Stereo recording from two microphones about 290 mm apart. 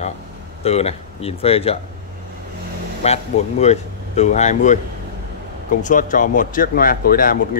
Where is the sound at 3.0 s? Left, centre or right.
Left.